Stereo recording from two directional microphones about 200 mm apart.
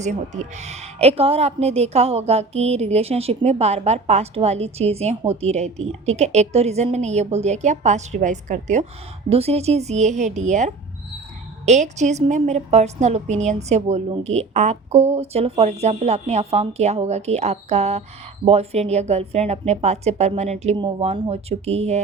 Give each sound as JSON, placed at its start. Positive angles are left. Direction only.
{"t": 0.0, "sound": "a woman's voice", "side_deg": -35}